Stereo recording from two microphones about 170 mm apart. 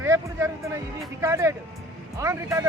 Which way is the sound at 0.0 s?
15° right (ahead or behind).